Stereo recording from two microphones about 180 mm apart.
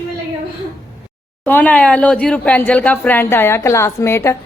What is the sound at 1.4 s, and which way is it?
Speech, 10° left (ahead or behind).